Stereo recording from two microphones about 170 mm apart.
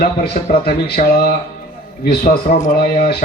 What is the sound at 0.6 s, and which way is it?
Speech, 60° left (ahead or behind).